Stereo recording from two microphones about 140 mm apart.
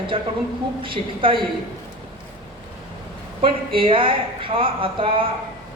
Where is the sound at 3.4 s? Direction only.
40° right (ahead or behind).